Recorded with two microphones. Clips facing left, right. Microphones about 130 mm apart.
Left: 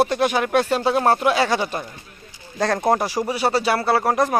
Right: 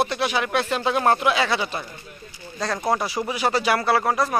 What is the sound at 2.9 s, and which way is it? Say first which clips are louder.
Speech: left 3 dB; 50° left (ahead or behind).